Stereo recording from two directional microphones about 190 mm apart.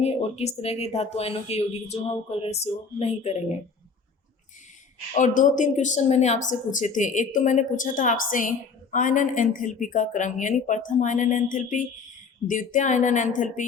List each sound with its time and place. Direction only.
0.0 s speech: 35° left (ahead or behind)
5.1 s a woman's voice: 40° left (ahead or behind)